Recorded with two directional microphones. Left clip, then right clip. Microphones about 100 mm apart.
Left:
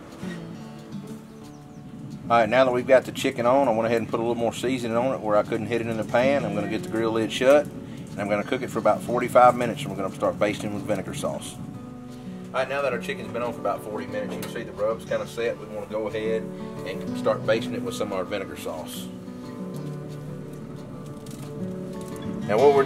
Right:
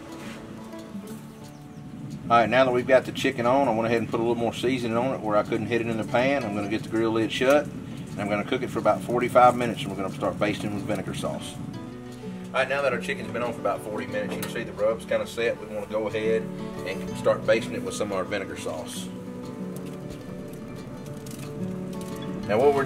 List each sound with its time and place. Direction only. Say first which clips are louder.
2.2 s speech: left 1 dB; 35° left (ahead or behind)
12.5 s speech: right 1 dB; 5° left (ahead or behind)